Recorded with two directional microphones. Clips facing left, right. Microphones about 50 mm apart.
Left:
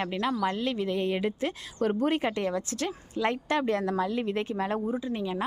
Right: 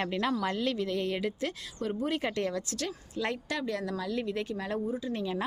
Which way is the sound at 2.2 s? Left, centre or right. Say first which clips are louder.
Left 3 dB; centre.